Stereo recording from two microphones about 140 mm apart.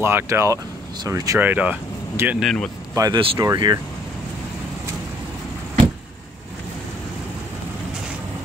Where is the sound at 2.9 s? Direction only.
25° right (ahead or behind).